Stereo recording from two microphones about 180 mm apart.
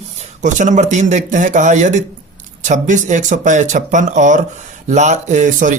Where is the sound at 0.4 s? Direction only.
45° right (ahead or behind).